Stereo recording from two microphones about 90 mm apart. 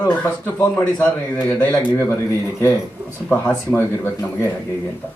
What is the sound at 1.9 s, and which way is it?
Speech, 30° left (ahead or behind).